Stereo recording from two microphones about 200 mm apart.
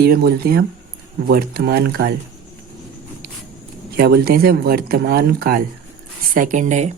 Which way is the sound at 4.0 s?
50° right (ahead or behind).